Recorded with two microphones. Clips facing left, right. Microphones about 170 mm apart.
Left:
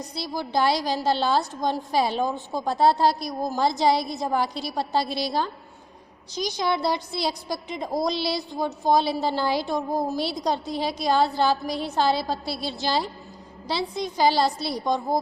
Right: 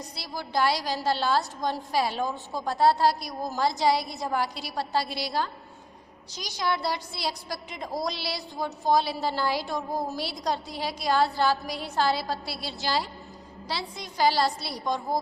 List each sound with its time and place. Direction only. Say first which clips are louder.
0.2 s a woman's voice: left 3 dB; 20° left (ahead or behind)
6.6 s a woman's voice: left 3 dB; 20° left (ahead or behind)